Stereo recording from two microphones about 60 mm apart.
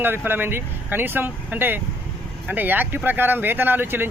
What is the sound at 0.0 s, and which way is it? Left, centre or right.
A man's voice, right.